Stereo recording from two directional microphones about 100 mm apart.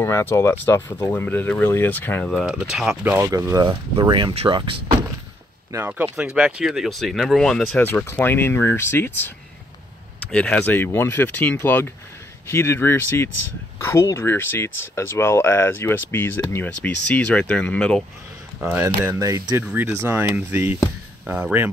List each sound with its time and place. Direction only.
0.0 s speech: 25° left (ahead or behind)
2.4 s speech: 10° right (ahead or behind)
3.0 s speech: 20° right (ahead or behind)
3.6 s speech: 55° right (ahead or behind)
6.1 s speech: 15° right (ahead or behind); by 7.8 s 5° left (ahead or behind)
7.8 s speech: 25° left (ahead or behind)
10.3 s speech: 10° left (ahead or behind)
10.6 s speech: 20° left (ahead or behind)
18.6 s speech: 20° right (ahead or behind)
19.1 s speech: 35° right (ahead or behind)
19.6 s speech: 15° right (ahead or behind)